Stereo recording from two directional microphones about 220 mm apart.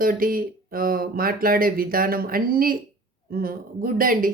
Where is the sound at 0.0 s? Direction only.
40° right (ahead or behind).